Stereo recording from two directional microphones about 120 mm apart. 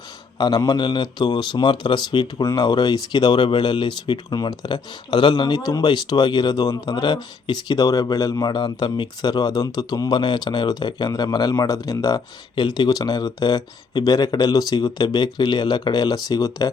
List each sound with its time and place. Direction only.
0.3 s speech: 35° left (ahead or behind)